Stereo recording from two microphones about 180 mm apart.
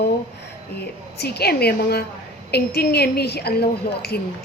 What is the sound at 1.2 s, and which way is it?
A woman's voice, 65° left (ahead or behind).